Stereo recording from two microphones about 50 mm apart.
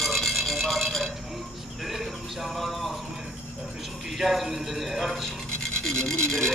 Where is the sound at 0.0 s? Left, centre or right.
Centre.